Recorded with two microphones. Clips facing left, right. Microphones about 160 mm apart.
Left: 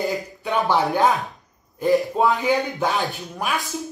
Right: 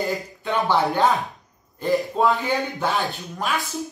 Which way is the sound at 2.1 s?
15° left (ahead or behind).